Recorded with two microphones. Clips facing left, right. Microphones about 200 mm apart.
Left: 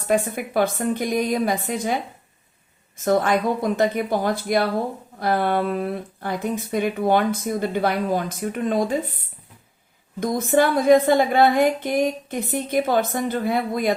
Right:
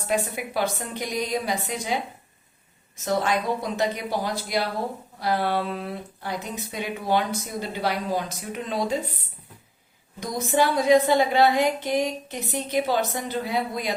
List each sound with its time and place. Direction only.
0.1 s a woman's voice: 50° left (ahead or behind)
10.2 s a woman's voice: 55° left (ahead or behind)